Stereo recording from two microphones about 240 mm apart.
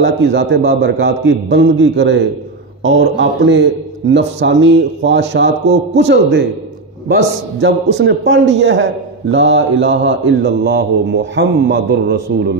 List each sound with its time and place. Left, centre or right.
0.0 s a man's voice: right